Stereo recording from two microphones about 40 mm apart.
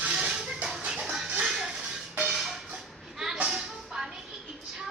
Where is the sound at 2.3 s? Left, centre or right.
Centre.